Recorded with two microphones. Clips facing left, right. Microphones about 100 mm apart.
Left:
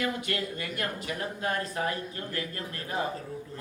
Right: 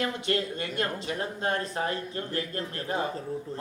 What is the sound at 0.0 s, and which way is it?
Speech, 30° right (ahead or behind).